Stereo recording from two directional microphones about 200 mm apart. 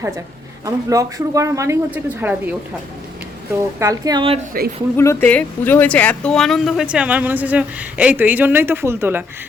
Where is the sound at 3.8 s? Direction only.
20° right (ahead or behind).